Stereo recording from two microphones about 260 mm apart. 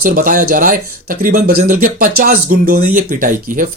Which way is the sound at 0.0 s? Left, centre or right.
Right.